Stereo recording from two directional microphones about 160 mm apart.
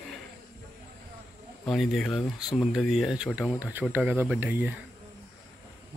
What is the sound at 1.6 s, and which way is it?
Speech, centre (ahead or behind).